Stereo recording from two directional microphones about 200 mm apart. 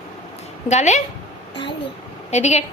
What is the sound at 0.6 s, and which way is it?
Speech, 35° left (ahead or behind).